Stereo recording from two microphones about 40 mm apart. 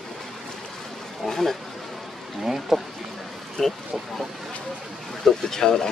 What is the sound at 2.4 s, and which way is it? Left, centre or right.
Speech, centre.